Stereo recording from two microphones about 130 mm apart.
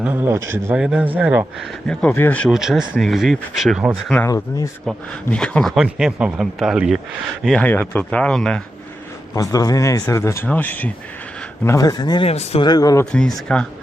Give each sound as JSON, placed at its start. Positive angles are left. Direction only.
{"t": 0.0, "sound": "a man's voice", "side_deg": -15}
{"t": 0.8, "sound": "a man's voice", "side_deg": -5}
{"t": 1.5, "sound": "speech", "side_deg": 0}
{"t": 2.5, "sound": "speech", "side_deg": -5}
{"t": 4.3, "sound": "speech", "side_deg": 25}
{"t": 4.9, "sound": "speech", "side_deg": 5}
{"t": 7.4, "sound": "speech", "side_deg": 10}
{"t": 9.3, "sound": "speech", "side_deg": 25}
{"t": 11.6, "sound": "speech", "side_deg": 25}
{"t": 12.3, "sound": "speech", "side_deg": 55}
{"t": 12.6, "sound": "speech", "side_deg": 30}
{"t": 13.1, "sound": "speech", "side_deg": 5}